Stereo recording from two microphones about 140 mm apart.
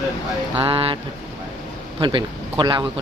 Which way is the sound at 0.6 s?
40° right (ahead or behind).